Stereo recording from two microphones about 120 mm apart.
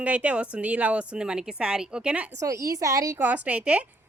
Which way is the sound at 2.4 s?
25° right (ahead or behind).